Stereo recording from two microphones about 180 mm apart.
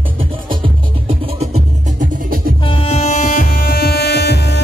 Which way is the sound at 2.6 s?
30° left (ahead or behind).